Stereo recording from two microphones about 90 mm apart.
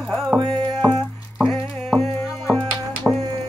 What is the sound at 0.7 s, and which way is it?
Music, 20° left (ahead or behind).